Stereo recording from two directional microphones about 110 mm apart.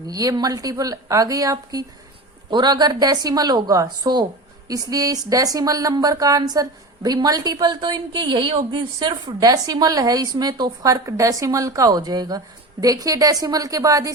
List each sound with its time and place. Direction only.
0.1 s speech: 35° right (ahead or behind)